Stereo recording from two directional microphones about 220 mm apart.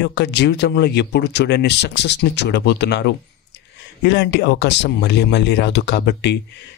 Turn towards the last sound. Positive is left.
turn(degrees=50)  # may be behind; listen again after turning